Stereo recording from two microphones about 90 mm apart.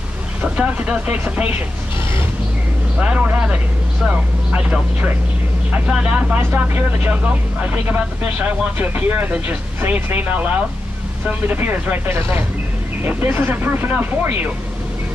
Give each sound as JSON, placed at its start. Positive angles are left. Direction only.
{"t": 0.4, "sound": "speech", "side_deg": -15}
{"t": 3.0, "sound": "speech", "side_deg": -15}